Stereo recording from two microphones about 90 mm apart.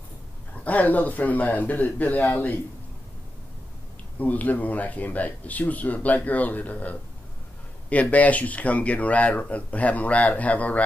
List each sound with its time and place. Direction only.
0.7 s speech: 20° left (ahead or behind)
4.2 s speech: 15° left (ahead or behind)